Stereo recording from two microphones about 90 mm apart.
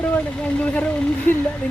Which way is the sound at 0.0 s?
15° left (ahead or behind).